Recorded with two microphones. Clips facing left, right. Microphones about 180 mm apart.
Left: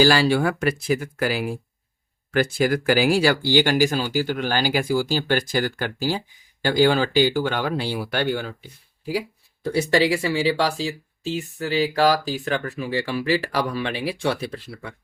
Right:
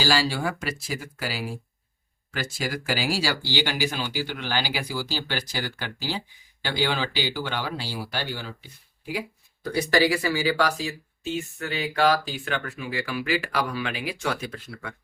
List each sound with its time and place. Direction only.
0.0 s speech: 60° left (ahead or behind)
9.6 s speech: 25° left (ahead or behind)